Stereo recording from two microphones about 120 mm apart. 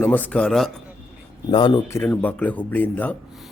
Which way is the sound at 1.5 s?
45° left (ahead or behind).